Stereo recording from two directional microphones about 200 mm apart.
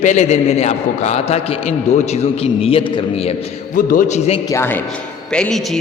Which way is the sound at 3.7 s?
45° left (ahead or behind).